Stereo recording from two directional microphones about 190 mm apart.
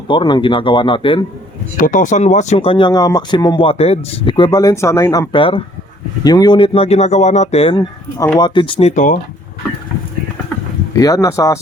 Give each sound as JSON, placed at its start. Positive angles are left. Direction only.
{"t": 0.1, "sound": "speech", "side_deg": 25}
{"t": 1.7, "sound": "speech", "side_deg": 45}
{"t": 7.8, "sound": "speech", "side_deg": 15}
{"t": 10.9, "sound": "speech", "side_deg": 15}